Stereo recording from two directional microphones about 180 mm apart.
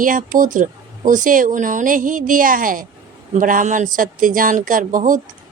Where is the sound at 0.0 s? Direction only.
50° right (ahead or behind).